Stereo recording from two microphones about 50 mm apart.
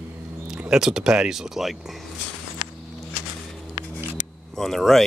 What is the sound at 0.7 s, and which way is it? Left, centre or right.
Speech, centre.